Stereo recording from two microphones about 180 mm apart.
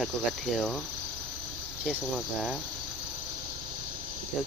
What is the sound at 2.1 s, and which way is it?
Speech, 5° left (ahead or behind).